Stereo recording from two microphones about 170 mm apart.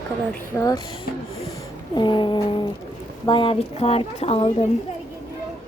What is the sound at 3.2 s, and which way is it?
A woman's voice, 30° left (ahead or behind).